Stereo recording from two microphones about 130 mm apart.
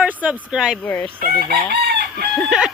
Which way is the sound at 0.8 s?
10° left (ahead or behind).